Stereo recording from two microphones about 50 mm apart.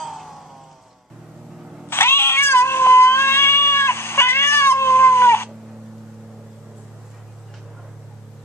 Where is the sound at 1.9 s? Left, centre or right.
Left.